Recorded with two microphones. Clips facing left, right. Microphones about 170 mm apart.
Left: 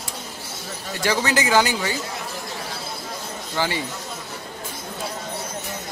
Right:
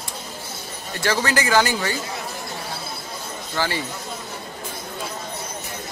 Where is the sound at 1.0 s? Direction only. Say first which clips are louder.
Even; 15° left (ahead or behind).